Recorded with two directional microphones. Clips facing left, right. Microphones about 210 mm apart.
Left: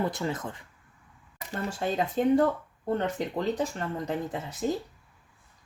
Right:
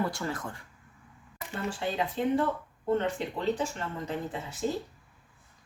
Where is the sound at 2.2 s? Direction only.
40° left (ahead or behind).